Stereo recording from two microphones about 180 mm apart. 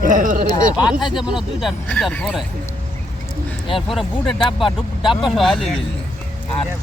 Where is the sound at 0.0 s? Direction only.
45° right (ahead or behind).